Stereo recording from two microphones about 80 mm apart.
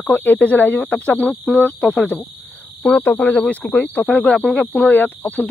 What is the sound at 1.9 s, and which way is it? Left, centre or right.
Speech, centre.